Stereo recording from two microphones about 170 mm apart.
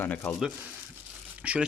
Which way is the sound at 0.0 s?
10° left (ahead or behind).